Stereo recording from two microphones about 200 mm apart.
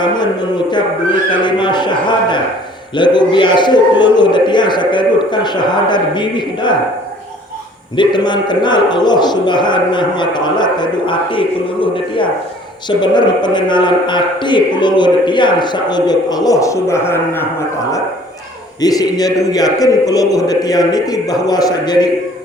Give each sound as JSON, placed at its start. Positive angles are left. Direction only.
{"t": 0.0, "sound": "a man's voice", "side_deg": 20}
{"t": 7.9, "sound": "a man's voice", "side_deg": 20}
{"t": 18.8, "sound": "a man's voice", "side_deg": 20}